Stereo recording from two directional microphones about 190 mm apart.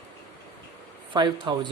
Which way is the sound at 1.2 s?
25° right (ahead or behind).